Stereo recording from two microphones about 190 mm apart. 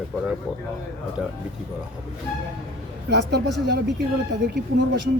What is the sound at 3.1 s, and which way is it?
Speech, 65° right (ahead or behind).